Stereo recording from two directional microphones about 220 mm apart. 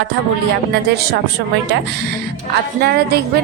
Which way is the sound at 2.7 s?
45° right (ahead or behind).